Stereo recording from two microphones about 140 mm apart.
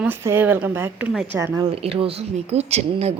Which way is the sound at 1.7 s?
45° right (ahead or behind).